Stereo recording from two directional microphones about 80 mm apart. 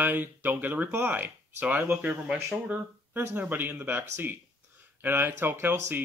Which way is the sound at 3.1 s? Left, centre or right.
Right.